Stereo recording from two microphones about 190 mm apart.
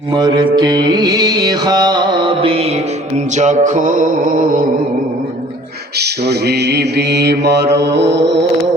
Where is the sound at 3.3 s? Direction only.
40° right (ahead or behind).